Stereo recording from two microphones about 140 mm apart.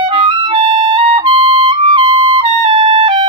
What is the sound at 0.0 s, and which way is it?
Music, 35° right (ahead or behind).